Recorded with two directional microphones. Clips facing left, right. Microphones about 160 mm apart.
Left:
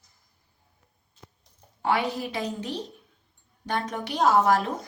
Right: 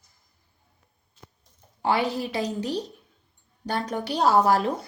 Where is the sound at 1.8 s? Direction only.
30° right (ahead or behind).